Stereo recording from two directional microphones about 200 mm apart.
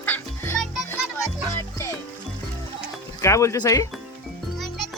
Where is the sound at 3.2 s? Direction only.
15° left (ahead or behind).